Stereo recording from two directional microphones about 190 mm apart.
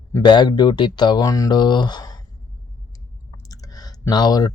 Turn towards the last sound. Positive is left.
turn(degrees=20)  # may be behind; listen again after turning